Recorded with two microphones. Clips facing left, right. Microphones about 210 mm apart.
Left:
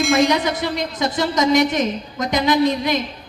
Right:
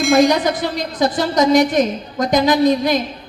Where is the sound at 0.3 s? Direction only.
40° right (ahead or behind).